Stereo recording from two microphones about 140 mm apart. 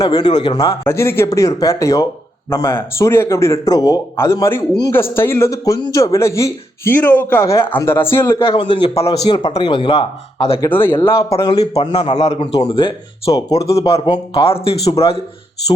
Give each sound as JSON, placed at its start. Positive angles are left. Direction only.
{"t": 0.0, "sound": "speech", "side_deg": 30}
{"t": 8.4, "sound": "a man's voice", "side_deg": 35}
{"t": 10.7, "sound": "speech", "side_deg": 15}
{"t": 11.3, "sound": "speech", "side_deg": 35}
{"t": 11.8, "sound": "speech", "side_deg": 45}
{"t": 12.5, "sound": "a man's voice", "side_deg": 35}